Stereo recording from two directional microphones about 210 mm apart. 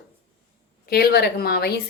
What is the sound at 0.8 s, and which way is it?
Speech, 45° left (ahead or behind).